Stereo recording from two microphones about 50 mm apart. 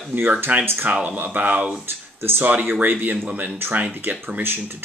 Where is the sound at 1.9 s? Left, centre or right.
Right.